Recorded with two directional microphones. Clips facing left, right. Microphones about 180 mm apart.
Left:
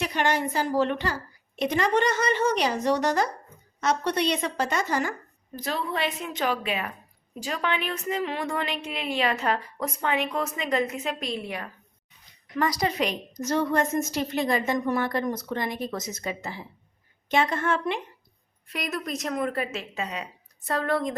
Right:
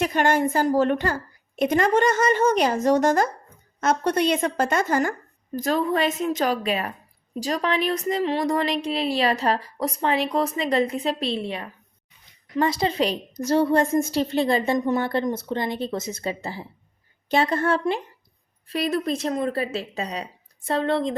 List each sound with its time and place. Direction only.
0.0 s a woman's voice: 50° right (ahead or behind); by 21.2 s 25° right (ahead or behind)